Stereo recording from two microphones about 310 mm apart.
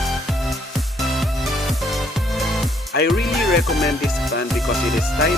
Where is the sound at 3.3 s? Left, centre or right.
Centre.